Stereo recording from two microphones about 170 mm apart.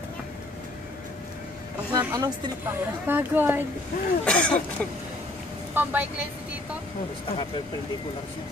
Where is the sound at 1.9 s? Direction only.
20° right (ahead or behind).